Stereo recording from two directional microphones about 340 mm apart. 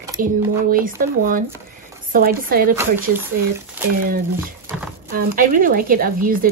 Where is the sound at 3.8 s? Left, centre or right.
Centre.